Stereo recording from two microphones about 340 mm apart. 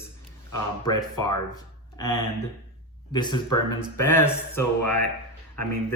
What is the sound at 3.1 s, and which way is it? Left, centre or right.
Speech, centre.